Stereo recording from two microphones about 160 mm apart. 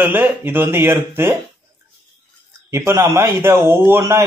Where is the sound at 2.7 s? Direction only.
15° right (ahead or behind).